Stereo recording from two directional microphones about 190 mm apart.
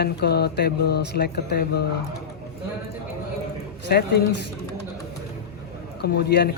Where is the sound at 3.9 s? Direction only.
60° left (ahead or behind).